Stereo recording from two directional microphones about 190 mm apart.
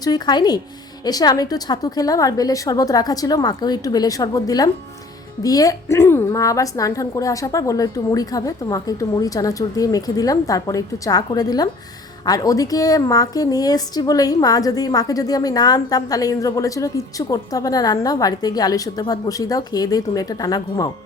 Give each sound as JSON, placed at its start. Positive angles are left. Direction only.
{"t": 0.0, "sound": "a woman's voice", "side_deg": 20}